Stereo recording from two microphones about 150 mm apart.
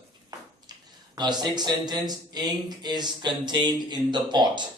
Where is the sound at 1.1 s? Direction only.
30° right (ahead or behind).